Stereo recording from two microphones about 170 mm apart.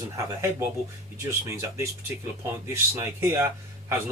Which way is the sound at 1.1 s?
15° right (ahead or behind).